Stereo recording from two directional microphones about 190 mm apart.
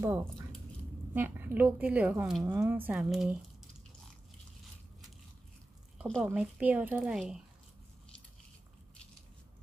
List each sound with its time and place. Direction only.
0.0 s a woman's voice: 15° right (ahead or behind)
6.2 s a woman's voice: 10° right (ahead or behind)